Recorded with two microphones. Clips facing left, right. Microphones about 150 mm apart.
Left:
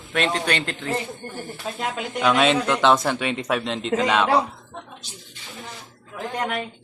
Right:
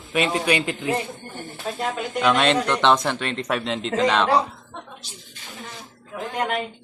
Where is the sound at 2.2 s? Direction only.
5° left (ahead or behind).